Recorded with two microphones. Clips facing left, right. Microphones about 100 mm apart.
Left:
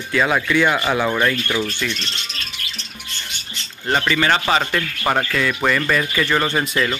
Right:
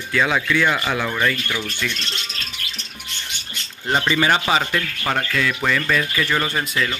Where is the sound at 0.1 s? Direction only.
5° left (ahead or behind).